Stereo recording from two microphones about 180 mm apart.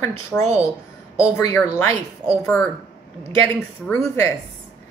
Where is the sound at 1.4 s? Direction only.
15° left (ahead or behind).